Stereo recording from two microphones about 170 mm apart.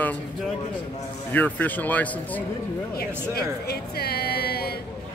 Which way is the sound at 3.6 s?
70° left (ahead or behind).